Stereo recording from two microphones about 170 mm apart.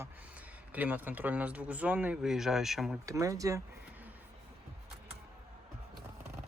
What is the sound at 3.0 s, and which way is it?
Speech, 20° right (ahead or behind).